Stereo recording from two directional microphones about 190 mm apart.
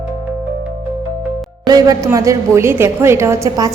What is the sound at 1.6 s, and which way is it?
A woman's voice, 20° right (ahead or behind).